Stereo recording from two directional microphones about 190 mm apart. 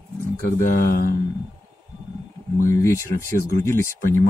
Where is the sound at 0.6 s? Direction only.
45° left (ahead or behind).